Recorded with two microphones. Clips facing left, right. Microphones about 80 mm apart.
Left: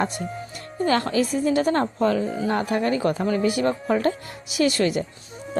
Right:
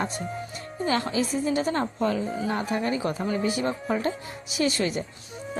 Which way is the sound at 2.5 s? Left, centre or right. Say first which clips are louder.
Left 5 dB; left.